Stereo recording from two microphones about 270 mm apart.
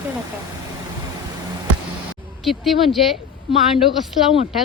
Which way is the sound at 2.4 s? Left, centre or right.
Centre.